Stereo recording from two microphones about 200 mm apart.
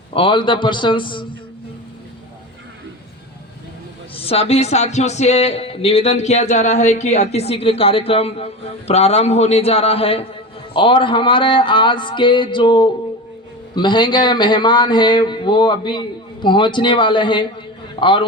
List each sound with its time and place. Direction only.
0.1 s a man's voice: 25° left (ahead or behind)
4.1 s a man's voice: 30° left (ahead or behind)